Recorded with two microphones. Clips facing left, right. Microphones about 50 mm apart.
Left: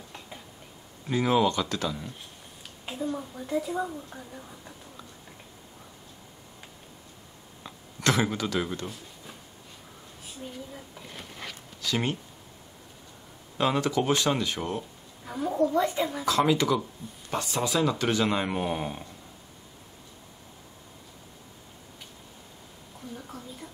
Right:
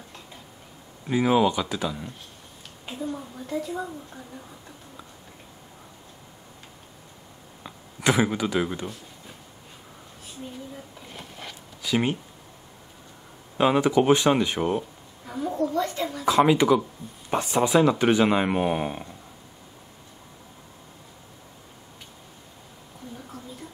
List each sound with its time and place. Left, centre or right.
1.0 s speech: centre
2.8 s a woman's voice: centre
7.6 s speech: centre
11.8 s speech: centre
13.6 s speech: centre
15.2 s a woman's voice: centre
15.7 s speech: centre
16.3 s speech: right